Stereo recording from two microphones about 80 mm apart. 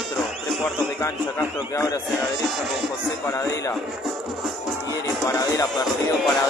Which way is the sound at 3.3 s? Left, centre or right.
Left.